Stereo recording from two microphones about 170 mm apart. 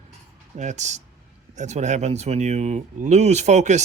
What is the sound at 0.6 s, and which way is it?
Speech, 45° right (ahead or behind).